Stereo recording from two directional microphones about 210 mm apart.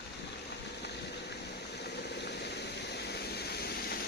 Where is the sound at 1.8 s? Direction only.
50° left (ahead or behind).